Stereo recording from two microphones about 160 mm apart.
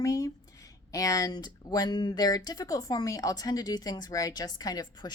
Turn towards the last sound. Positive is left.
turn(degrees=25)  # may be behind; listen again after turning